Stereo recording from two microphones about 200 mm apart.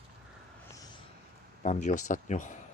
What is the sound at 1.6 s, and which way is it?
Speech, 40° left (ahead or behind).